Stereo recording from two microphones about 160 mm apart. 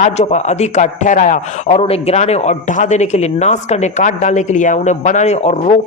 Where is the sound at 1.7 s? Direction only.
40° left (ahead or behind).